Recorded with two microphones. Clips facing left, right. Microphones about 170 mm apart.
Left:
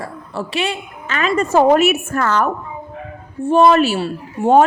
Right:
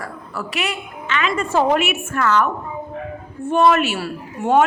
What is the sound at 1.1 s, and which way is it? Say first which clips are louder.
A woman's voice: left 4 dB; 40° left (ahead or behind).